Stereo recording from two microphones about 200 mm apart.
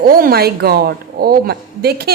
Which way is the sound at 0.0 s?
45° right (ahead or behind).